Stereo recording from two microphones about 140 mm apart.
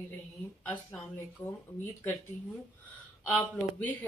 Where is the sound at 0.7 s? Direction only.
10° left (ahead or behind).